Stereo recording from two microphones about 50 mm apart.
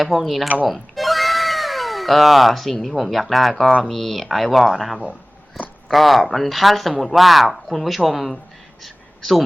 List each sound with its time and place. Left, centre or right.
0.0 s speech: centre
0.4 s speech: right
0.7 s speech: centre
5.6 s a sound: centre
5.9 s speech: centre
8.8 s a sound: centre